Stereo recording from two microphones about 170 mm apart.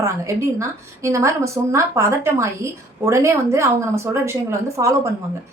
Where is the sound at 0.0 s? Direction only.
15° right (ahead or behind).